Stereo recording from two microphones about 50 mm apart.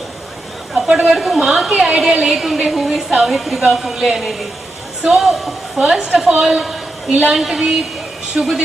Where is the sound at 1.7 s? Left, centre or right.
Centre.